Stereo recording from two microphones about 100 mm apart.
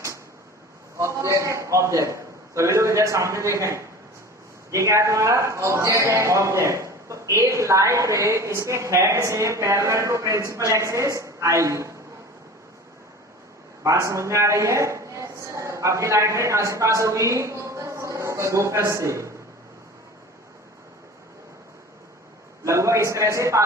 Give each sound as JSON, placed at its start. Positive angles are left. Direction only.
{"t": 0.9, "sound": "a man's voice", "side_deg": -30}
{"t": 13.8, "sound": "a woman's voice", "side_deg": -30}
{"t": 22.6, "sound": "a man's voice", "side_deg": -30}